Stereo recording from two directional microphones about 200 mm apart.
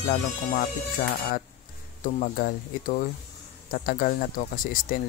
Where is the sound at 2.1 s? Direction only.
45° left (ahead or behind).